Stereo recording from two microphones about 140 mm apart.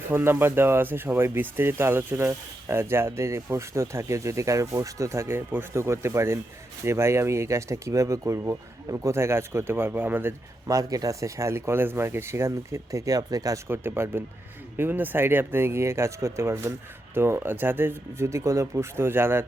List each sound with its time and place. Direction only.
0.1 s speech: 15° right (ahead or behind)